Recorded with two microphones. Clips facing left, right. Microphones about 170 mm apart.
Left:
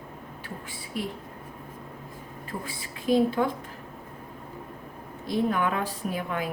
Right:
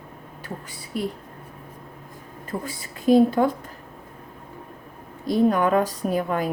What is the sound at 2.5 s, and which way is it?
A woman's voice, 40° right (ahead or behind).